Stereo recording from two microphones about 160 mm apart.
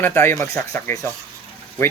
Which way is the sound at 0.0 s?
15° left (ahead or behind).